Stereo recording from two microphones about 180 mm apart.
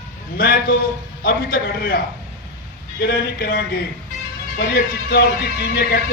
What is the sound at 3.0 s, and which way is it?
Speech, 60° left (ahead or behind).